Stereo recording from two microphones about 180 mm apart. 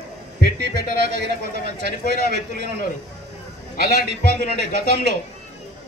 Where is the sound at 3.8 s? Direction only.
70° right (ahead or behind).